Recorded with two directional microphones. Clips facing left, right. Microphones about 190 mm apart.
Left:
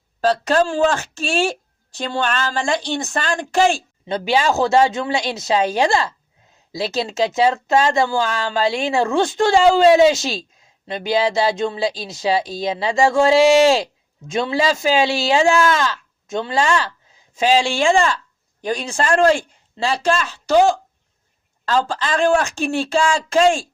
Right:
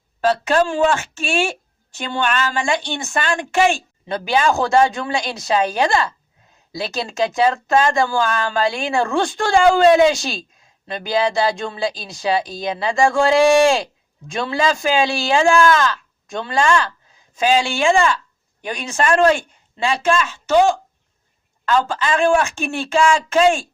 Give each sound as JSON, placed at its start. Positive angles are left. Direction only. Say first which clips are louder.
{"t": 0.2, "sound": "a woman's voice", "louder": "even", "side_deg": 35}